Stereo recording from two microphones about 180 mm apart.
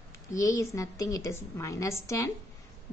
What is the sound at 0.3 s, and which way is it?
A woman's voice, 20° left (ahead or behind).